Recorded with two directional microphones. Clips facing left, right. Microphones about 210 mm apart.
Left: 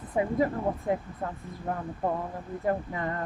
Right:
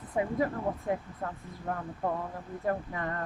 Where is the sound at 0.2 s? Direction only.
25° left (ahead or behind).